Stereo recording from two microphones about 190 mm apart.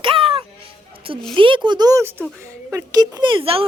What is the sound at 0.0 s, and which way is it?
Music, 30° right (ahead or behind).